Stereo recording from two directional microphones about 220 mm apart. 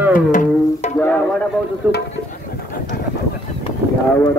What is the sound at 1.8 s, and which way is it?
Speech, 5° right (ahead or behind).